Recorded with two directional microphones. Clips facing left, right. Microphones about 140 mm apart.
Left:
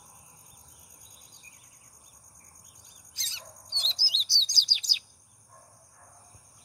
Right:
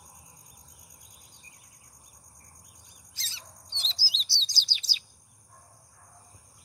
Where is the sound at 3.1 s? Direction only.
20° left (ahead or behind).